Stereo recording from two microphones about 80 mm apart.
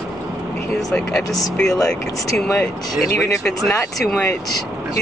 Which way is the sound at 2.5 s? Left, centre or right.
Left.